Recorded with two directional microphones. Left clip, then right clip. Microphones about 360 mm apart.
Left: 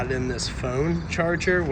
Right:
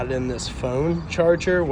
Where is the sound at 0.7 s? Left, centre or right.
Right.